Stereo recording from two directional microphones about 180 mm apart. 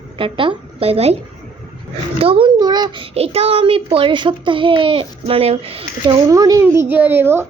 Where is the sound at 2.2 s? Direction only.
30° right (ahead or behind).